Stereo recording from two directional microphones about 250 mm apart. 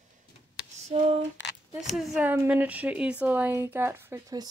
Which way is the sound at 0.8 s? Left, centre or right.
Right.